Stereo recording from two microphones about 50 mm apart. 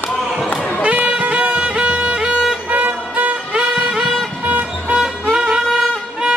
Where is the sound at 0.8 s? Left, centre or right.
Right.